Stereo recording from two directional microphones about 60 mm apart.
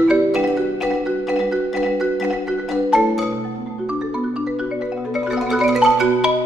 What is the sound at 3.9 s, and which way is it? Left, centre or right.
Music, centre.